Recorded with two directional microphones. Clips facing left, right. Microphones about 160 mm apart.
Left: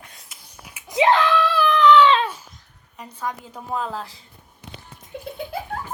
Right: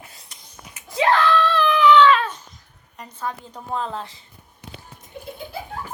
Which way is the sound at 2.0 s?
25° left (ahead or behind).